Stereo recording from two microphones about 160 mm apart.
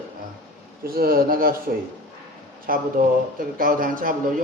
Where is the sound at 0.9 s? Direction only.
70° right (ahead or behind).